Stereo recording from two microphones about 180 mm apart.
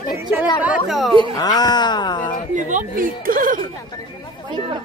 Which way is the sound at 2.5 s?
45° right (ahead or behind).